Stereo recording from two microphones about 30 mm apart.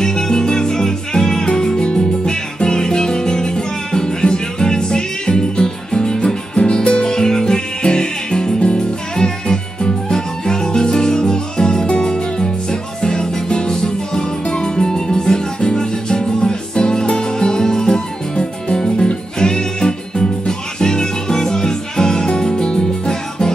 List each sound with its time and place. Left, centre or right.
0.0 s music: left
8.5 s music: left
9.1 s music: left